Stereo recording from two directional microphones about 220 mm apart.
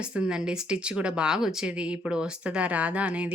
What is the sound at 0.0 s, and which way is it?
Speech, 5° right (ahead or behind).